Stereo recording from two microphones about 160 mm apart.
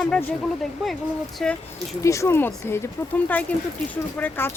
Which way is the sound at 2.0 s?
20° left (ahead or behind).